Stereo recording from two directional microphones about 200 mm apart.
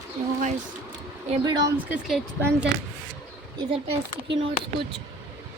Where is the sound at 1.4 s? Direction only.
20° right (ahead or behind).